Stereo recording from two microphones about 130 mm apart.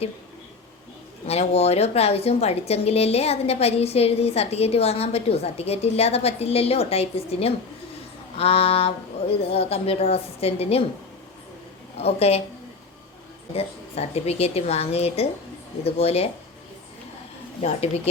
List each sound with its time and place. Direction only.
1.3 s a woman's voice: 50° left (ahead or behind)
11.9 s a woman's voice: 50° left (ahead or behind)
13.5 s a woman's voice: 50° left (ahead or behind)
17.6 s a woman's voice: 55° left (ahead or behind)